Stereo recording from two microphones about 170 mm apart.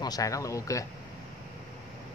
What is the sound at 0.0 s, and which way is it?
Speech, 20° left (ahead or behind).